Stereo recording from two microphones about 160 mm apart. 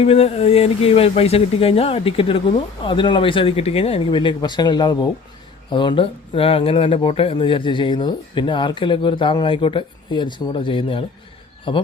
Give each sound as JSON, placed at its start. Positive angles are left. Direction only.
{"t": 0.0, "sound": "speech", "side_deg": 40}